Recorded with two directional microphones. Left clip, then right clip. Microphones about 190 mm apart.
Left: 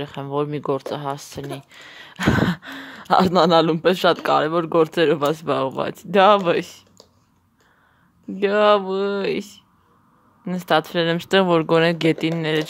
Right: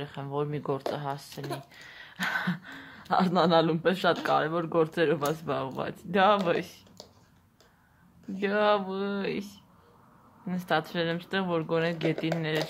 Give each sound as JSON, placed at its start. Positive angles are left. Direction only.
{"t": 0.0, "sound": "speech", "side_deg": 40}
{"t": 8.4, "sound": "speech", "side_deg": 40}